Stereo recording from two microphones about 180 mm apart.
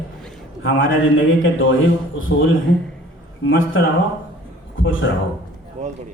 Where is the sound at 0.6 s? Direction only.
90° left.